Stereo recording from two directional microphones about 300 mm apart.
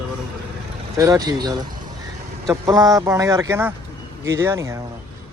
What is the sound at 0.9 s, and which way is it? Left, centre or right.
Speech, centre.